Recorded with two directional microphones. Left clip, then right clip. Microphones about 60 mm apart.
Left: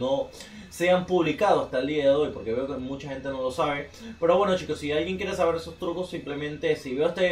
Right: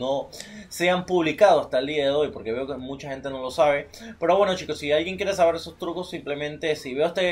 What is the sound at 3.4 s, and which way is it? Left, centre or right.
Speech, centre.